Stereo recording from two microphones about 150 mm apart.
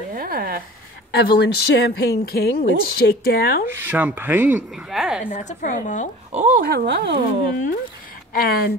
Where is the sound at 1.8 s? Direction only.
90° left.